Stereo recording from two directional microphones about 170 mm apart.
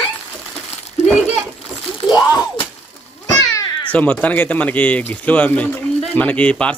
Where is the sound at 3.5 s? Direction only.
20° left (ahead or behind).